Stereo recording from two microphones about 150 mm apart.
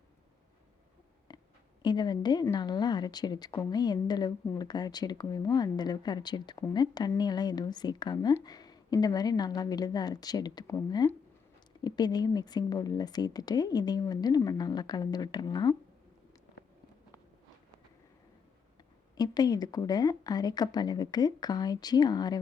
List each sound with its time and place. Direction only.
1.3 s a sound: 30° left (ahead or behind)
1.8 s speech: 30° left (ahead or behind)
19.1 s speech: 25° left (ahead or behind)